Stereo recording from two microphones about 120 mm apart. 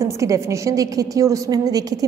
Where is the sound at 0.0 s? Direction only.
25° right (ahead or behind).